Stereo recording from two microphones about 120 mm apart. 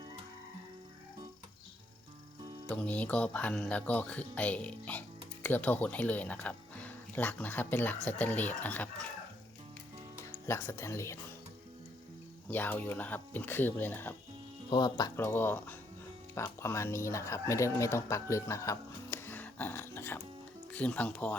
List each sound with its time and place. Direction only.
2.6 s speech: 15° left (ahead or behind)
10.4 s speech: 20° left (ahead or behind)
12.5 s speech: 15° left (ahead or behind)
14.7 s speech: 35° left (ahead or behind)
15.1 s speech: 20° left (ahead or behind)